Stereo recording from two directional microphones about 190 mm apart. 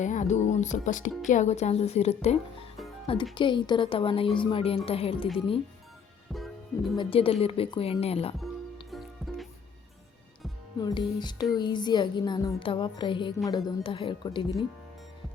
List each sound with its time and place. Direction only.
0.0 s speech: 40° left (ahead or behind)
3.3 s music: 25° left (ahead or behind)
4.9 s speech: 30° left (ahead or behind)
6.9 s music: 25° left (ahead or behind)
7.4 s speech: 30° left (ahead or behind)
8.9 s music: centre (ahead or behind)
10.8 s music: 25° left (ahead or behind)